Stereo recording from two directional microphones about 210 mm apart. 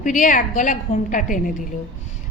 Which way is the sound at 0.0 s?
35° left (ahead or behind).